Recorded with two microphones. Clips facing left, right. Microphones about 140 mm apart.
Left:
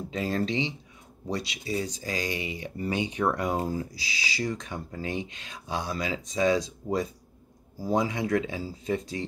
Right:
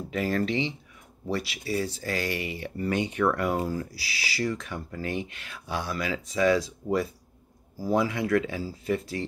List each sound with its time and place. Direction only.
0.1 s speech: 20° left (ahead or behind)